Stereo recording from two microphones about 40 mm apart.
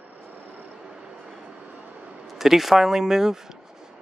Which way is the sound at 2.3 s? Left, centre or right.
Centre.